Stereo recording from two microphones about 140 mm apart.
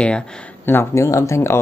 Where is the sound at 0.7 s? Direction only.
20° left (ahead or behind).